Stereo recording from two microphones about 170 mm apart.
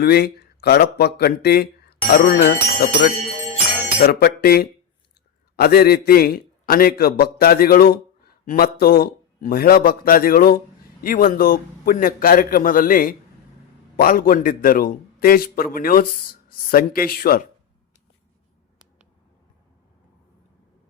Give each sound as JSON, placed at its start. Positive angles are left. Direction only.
{"t": 0.0, "sound": "speech", "side_deg": 65}
{"t": 4.0, "sound": "a man's voice", "side_deg": 65}